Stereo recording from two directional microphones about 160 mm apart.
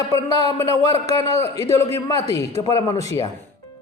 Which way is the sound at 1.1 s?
40° right (ahead or behind).